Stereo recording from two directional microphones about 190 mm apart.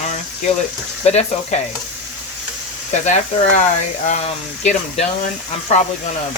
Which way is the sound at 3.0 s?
40° left (ahead or behind).